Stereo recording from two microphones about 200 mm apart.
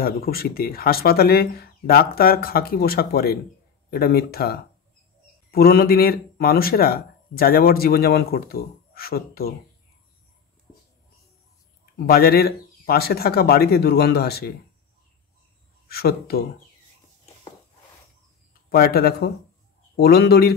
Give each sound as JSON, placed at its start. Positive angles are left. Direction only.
{"t": 0.0, "sound": "speech", "side_deg": 50}
{"t": 12.1, "sound": "speech", "side_deg": 50}
{"t": 15.9, "sound": "speech", "side_deg": 50}
{"t": 18.7, "sound": "speech", "side_deg": 50}